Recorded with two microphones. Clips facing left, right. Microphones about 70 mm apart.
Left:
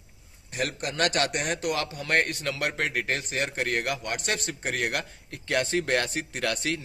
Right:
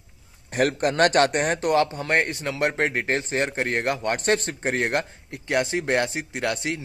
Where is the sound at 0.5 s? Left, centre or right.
Right.